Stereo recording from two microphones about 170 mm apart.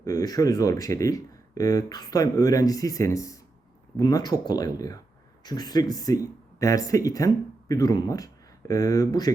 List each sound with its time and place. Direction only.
0.0 s speech: 20° left (ahead or behind)